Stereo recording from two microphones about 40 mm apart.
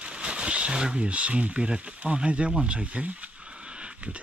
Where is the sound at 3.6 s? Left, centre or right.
Right.